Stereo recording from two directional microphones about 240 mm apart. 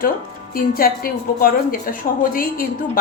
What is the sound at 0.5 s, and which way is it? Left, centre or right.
A woman's voice, left.